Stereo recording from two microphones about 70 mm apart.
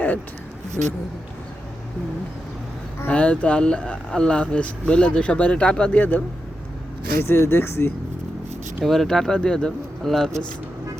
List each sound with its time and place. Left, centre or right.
3.1 s speech: centre
7.2 s speech: left
8.8 s speech: centre